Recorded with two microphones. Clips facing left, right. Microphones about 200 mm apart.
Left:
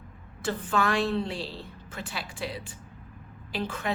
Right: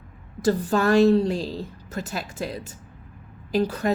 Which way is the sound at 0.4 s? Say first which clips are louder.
Right 7 dB; 40° right (ahead or behind).